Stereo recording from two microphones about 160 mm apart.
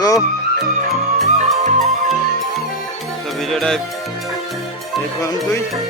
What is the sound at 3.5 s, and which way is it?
Speech, 5° left (ahead or behind).